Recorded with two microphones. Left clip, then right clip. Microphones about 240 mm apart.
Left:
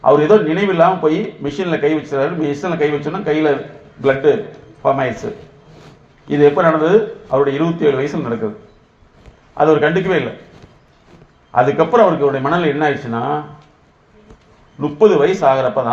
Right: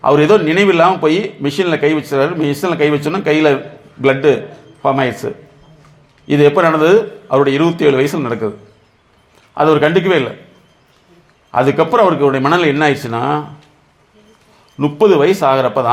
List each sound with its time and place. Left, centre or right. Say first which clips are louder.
0.0 s a man's voice: right 1 dB; right
9.6 s a man's voice: right 2 dB; right
11.5 s a man's voice: even; right
14.8 s a man's voice: right 1 dB; right